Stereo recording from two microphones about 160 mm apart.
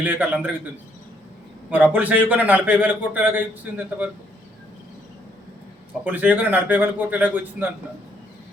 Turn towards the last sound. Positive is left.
turn(degrees=-10)  # may be behind; listen again after turning